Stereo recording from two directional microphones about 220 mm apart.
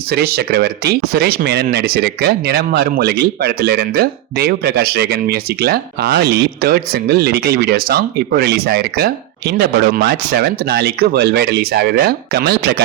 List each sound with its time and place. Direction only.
0.1 s speech: 45° right (ahead or behind)